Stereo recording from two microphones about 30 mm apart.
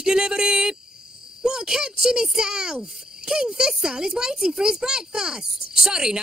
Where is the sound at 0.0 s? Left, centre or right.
Right.